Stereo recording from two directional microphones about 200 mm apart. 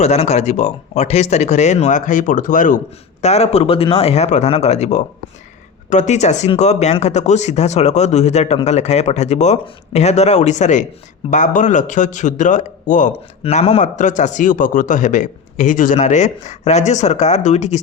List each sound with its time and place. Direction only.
0.0 s a man's voice: 30° left (ahead or behind)